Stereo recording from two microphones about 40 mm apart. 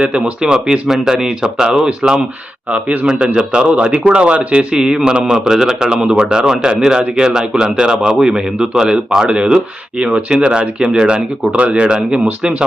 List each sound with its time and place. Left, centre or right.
0.0 s speech: right
0.9 s speech: centre
2.7 s speech: right
3.1 s a man's voice: right
9.3 s a man's voice: right